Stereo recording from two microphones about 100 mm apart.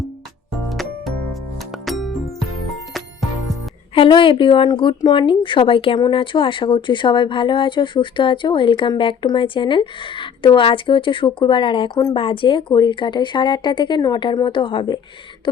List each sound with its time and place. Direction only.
0.7 s music: centre (ahead or behind)
3.9 s a woman's voice: 60° left (ahead or behind)
6.0 s a woman's voice: 55° left (ahead or behind)